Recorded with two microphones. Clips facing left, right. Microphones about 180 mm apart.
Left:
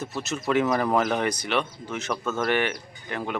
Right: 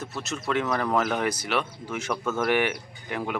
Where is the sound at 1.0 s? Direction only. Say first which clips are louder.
Left 1 dB; 5° right (ahead or behind).